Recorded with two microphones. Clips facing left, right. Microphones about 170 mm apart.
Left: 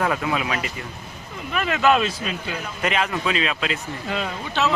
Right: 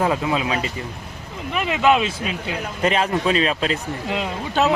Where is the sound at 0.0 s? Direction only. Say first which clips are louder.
Right 3 dB; 20° right (ahead or behind).